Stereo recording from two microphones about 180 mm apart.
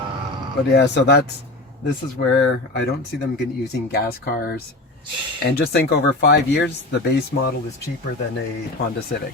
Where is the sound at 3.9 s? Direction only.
60° left (ahead or behind).